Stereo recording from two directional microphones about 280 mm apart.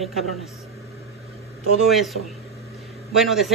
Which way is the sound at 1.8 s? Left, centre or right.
Centre.